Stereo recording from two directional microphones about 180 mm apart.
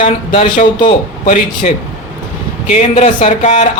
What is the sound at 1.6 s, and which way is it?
Speech, 40° left (ahead or behind).